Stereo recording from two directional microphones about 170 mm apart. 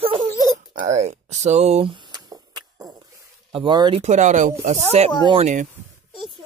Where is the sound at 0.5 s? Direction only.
45° right (ahead or behind).